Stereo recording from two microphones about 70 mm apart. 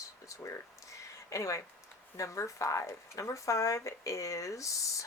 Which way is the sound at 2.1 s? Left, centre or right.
Left.